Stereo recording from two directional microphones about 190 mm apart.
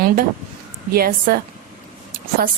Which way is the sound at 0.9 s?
50° right (ahead or behind).